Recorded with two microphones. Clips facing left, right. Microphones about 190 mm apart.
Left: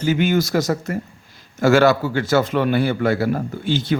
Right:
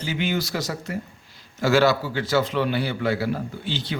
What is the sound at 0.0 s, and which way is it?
A man's voice, 45° left (ahead or behind).